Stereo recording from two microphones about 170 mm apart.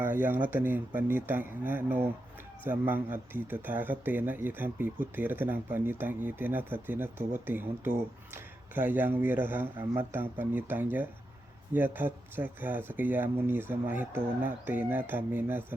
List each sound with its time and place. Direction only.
0.0 s speech: 10° right (ahead or behind)